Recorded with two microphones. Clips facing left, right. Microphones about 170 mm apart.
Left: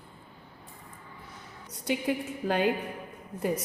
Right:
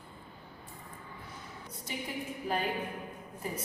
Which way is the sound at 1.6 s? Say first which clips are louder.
Left 12 dB; 75° left (ahead or behind).